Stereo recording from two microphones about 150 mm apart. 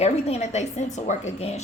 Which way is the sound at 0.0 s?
45° left (ahead or behind).